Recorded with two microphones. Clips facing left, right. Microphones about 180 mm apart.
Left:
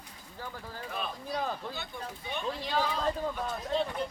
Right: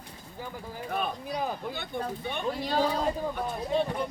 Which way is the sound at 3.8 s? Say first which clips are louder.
Right 4 dB; 55° right (ahead or behind).